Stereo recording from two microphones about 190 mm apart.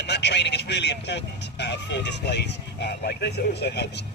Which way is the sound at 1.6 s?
65° left (ahead or behind).